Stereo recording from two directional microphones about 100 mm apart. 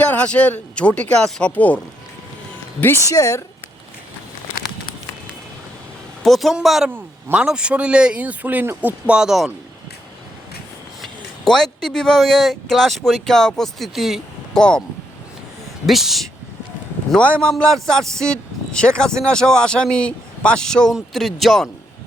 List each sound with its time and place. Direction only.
0.0 s speech: 15° left (ahead or behind)
3.1 s speech: 30° left (ahead or behind)
6.2 s a man's voice: centre (ahead or behind)
6.9 s speech: 20° right (ahead or behind)
7.4 s speech: 10° right (ahead or behind)
11.0 s speech: 5° left (ahead or behind)
14.6 s speech: 10° left (ahead or behind)
15.9 s a man's voice: centre (ahead or behind)
17.1 s speech: 10° left (ahead or behind)